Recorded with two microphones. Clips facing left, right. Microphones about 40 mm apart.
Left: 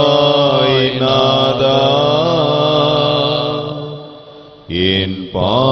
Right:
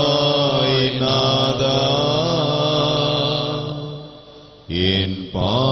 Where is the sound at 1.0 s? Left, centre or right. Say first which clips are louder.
Left 8 dB; left.